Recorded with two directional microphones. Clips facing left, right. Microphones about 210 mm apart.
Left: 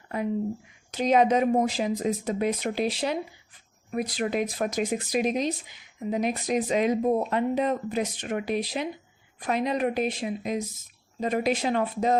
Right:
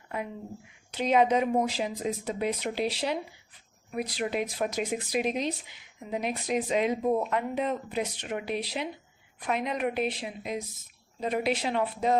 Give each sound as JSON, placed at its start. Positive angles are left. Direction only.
{"t": 0.9, "sound": "a woman's voice", "side_deg": 45}